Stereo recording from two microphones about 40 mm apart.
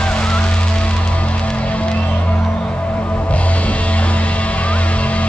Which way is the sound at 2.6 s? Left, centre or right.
Left.